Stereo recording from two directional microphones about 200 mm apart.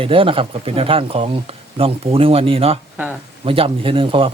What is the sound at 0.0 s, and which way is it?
Speech, 25° right (ahead or behind).